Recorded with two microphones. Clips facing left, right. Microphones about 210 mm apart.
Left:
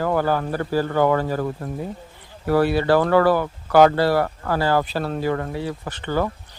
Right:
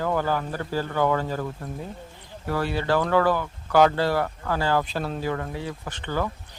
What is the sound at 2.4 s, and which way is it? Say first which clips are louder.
Speech: left 8 dB; 40° left (ahead or behind).